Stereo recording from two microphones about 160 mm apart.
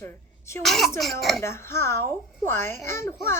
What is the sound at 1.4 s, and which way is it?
Speech, 15° left (ahead or behind).